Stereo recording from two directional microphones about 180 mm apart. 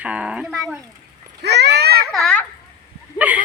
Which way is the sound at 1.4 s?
70° right (ahead or behind).